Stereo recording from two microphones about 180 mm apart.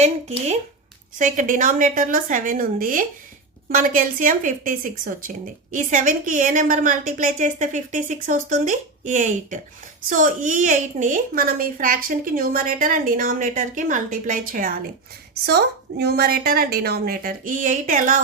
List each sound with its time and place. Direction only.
0.0 s a woman's voice: 40° right (ahead or behind)
15.4 s a woman's voice: 65° right (ahead or behind); by 18.2 s 45° right (ahead or behind)